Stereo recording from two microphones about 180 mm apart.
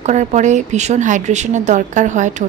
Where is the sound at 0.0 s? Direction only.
40° right (ahead or behind).